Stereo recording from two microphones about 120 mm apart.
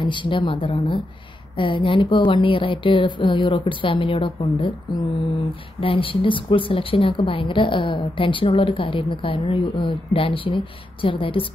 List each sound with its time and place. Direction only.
0.0 s a woman's voice: 40° left (ahead or behind)